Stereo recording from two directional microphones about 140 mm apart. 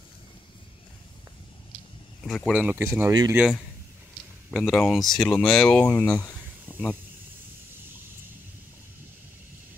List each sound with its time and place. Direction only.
2.2 s speech: centre (ahead or behind)
2.6 s speech: 15° right (ahead or behind)
3.1 s speech: 25° right (ahead or behind)
4.5 s speech: centre (ahead or behind)
5.9 s speech: 20° left (ahead or behind)